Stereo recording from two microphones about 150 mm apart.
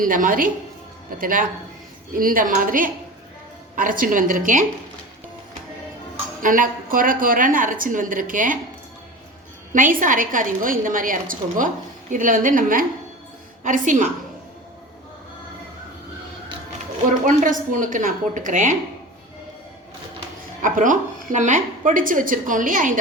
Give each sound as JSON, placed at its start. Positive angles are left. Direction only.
{"t": 0.0, "sound": "a woman's voice", "side_deg": -65}
{"t": 6.4, "sound": "a woman's voice", "side_deg": -65}
{"t": 9.9, "sound": "a woman's voice", "side_deg": -60}
{"t": 17.1, "sound": "a woman's voice", "side_deg": -60}
{"t": 20.6, "sound": "a woman's voice", "side_deg": -60}